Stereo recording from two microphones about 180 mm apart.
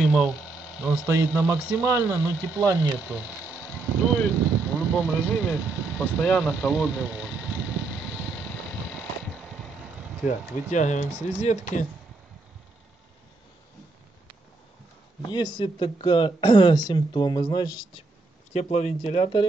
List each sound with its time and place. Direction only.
0.0 s hum: centre (ahead or behind)
0.8 s speech: 15° right (ahead or behind)
3.1 s speech: 5° right (ahead or behind)
3.5 s vehicle: 5° left (ahead or behind)
10.2 s speech: 40° left (ahead or behind)
15.2 s speech: 25° left (ahead or behind)
18.5 s speech: 40° left (ahead or behind)